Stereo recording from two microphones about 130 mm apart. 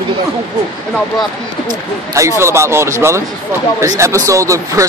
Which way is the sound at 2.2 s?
20° right (ahead or behind).